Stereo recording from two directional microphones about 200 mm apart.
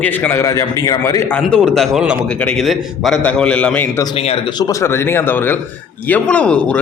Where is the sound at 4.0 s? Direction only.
30° left (ahead or behind).